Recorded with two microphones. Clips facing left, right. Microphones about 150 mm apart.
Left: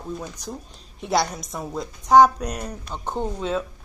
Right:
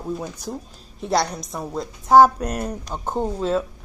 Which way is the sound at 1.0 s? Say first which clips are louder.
Right 1 dB; centre (ahead or behind).